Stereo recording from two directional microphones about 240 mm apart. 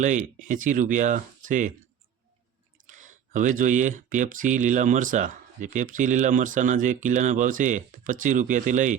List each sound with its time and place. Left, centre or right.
0.0 s speech: right
2.8 s speech: right